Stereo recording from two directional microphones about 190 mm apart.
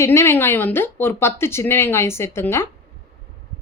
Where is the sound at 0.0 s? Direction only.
15° left (ahead or behind).